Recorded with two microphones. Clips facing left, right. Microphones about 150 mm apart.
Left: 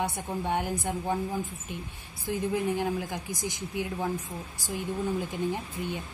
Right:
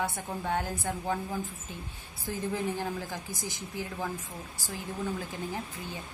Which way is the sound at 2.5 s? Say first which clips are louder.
Left 5 dB; 15° left (ahead or behind).